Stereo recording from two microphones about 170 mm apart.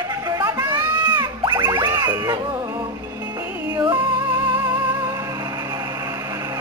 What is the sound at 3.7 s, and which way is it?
Music, 25° right (ahead or behind).